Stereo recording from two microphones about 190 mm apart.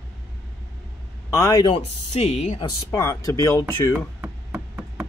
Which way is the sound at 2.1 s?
35° left (ahead or behind).